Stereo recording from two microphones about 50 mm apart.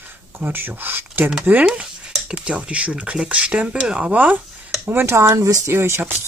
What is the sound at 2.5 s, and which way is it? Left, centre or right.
Speech, right.